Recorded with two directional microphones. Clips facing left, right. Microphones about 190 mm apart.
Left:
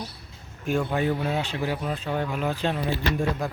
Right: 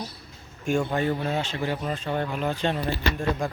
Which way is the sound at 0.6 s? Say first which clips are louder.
Even; 5° left (ahead or behind).